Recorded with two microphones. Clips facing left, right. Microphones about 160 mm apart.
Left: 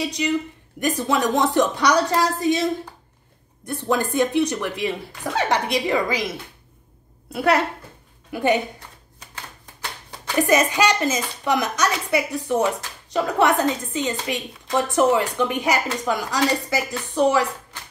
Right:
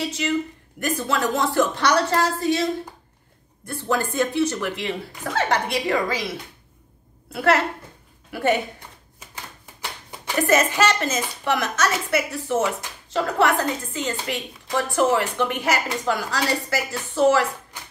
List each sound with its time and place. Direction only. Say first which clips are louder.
0.0 s a woman's voice: left 1 dB; 15° left (ahead or behind)
3.6 s a woman's voice: left 2 dB; 15° left (ahead or behind)
7.3 s a woman's voice: left 1 dB; 15° left (ahead or behind)
10.4 s a woman's voice: left 1 dB; 15° left (ahead or behind)